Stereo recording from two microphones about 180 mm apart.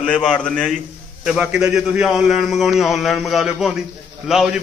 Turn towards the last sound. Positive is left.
turn(degrees=-5)  # may be behind; listen again after turning